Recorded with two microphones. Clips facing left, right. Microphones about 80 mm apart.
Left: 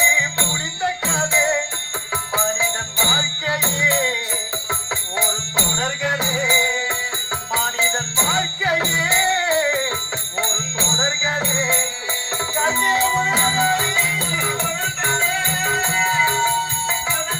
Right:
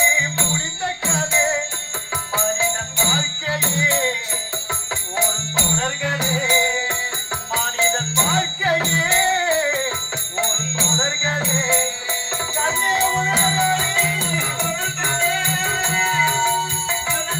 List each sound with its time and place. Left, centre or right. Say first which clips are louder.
0.0 s music: left 1 dB; centre
1.4 s music: left 1 dB; centre
3.0 s jingle bell: left 1 dB; left
5.8 s music: left 1 dB; centre